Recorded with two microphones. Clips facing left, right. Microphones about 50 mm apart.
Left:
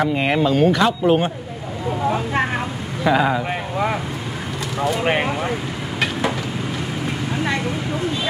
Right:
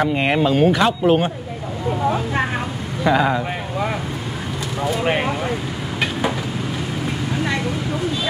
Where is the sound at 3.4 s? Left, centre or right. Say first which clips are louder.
Left 2 dB; centre.